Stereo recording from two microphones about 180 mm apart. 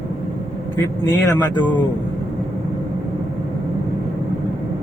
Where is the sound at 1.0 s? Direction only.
15° left (ahead or behind).